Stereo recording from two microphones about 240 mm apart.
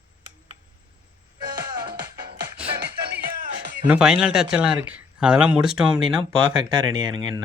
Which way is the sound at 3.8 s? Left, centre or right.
Centre.